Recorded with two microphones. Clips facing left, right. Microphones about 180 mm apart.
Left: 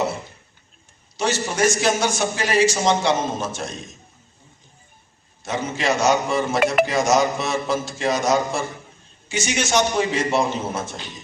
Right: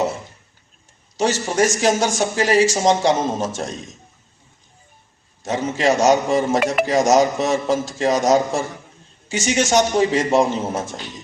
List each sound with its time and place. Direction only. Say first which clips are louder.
1.1 s a man's voice: right 4 dB; 40° right (ahead or behind)
5.4 s a man's voice: right 4 dB; 40° right (ahead or behind)